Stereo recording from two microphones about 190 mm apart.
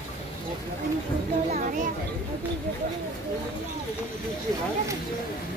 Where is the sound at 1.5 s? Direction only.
45° right (ahead or behind).